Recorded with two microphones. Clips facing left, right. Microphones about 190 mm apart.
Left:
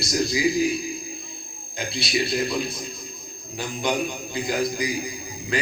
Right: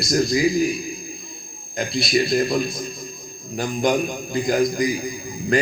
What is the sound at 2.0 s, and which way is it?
Speech, 50° right (ahead or behind).